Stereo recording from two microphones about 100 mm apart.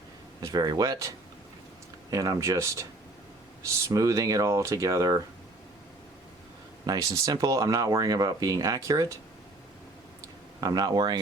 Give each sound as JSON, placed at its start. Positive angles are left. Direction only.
{"t": 0.4, "sound": "speech", "side_deg": -40}
{"t": 6.8, "sound": "speech", "side_deg": -35}
{"t": 10.6, "sound": "speech", "side_deg": -40}